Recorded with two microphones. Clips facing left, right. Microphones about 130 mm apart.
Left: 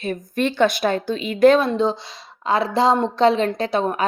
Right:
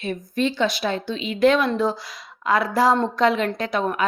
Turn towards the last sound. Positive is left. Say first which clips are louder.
# left 2 dB
turn(degrees=30)  # may be behind; listen again after turning